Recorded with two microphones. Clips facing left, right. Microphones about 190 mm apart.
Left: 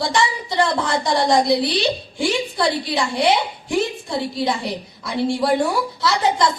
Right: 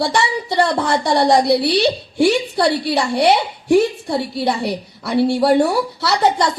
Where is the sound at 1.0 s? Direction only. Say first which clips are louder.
Right 3 dB; 65° right (ahead or behind).